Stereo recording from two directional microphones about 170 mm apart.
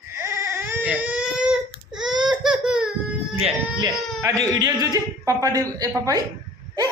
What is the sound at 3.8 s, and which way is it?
Speech, 20° right (ahead or behind).